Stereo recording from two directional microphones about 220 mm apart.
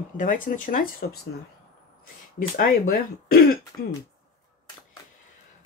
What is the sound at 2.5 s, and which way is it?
Speech, 40° left (ahead or behind).